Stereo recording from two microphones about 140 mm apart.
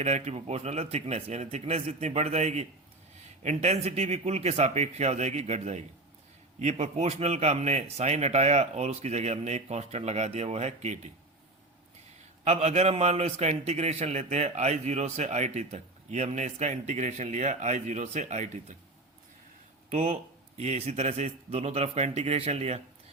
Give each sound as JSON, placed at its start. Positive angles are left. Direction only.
{"t": 0.0, "sound": "a man's voice", "side_deg": -50}
{"t": 12.5, "sound": "a man's voice", "side_deg": -50}
{"t": 19.9, "sound": "a man's voice", "side_deg": -50}